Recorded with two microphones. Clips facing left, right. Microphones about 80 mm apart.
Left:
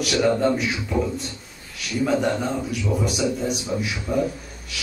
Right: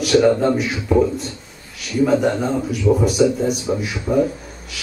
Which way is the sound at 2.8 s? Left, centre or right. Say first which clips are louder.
Right 10 dB; right.